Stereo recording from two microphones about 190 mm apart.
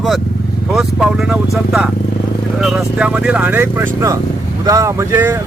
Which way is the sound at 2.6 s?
5° right (ahead or behind).